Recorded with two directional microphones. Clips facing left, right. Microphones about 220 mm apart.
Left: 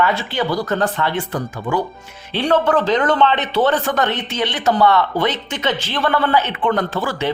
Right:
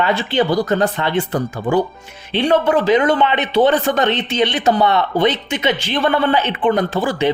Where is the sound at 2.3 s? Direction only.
15° right (ahead or behind).